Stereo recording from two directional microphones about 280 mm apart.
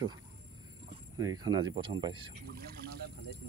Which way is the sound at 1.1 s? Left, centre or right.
Centre.